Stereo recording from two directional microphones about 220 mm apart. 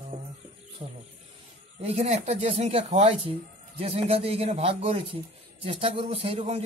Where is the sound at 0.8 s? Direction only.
25° right (ahead or behind).